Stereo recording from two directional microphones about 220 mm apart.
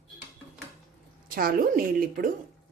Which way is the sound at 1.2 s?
40° right (ahead or behind).